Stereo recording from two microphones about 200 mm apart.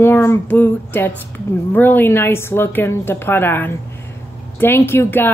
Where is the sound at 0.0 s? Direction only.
10° left (ahead or behind).